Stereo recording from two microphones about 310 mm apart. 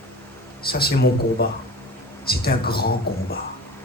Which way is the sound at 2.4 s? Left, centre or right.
Left.